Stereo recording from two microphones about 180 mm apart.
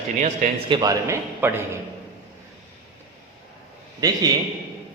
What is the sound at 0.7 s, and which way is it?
Speech, 20° right (ahead or behind).